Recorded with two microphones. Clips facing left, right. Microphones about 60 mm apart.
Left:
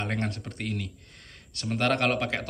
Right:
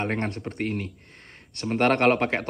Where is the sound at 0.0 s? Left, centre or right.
Right.